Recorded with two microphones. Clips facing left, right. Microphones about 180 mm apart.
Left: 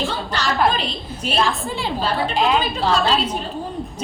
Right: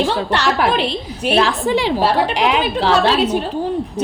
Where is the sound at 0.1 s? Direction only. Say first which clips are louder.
Right 6 dB; 70° right (ahead or behind).